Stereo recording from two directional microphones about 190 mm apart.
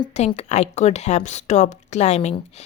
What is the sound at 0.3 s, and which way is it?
Speech, 35° left (ahead or behind).